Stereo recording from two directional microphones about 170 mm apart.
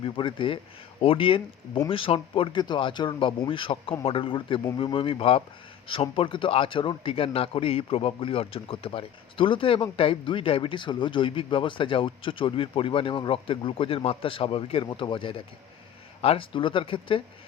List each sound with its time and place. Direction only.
0.0 s a man's voice: 30° left (ahead or behind)